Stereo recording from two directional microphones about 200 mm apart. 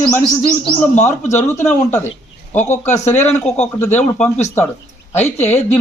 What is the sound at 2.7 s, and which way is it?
Speech, 35° left (ahead or behind).